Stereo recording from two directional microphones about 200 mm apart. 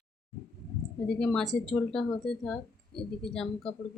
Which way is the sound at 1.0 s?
5° left (ahead or behind).